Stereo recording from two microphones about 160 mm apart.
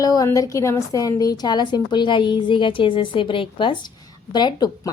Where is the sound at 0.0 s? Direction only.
20° left (ahead or behind).